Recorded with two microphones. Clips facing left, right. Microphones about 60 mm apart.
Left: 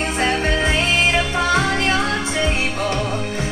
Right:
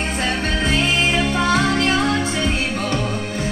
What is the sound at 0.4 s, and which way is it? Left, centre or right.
Music, centre.